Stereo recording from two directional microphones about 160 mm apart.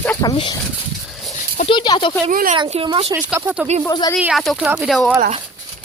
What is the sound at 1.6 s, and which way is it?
Speech, 30° left (ahead or behind).